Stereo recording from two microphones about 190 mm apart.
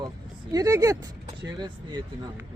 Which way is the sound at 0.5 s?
20° right (ahead or behind).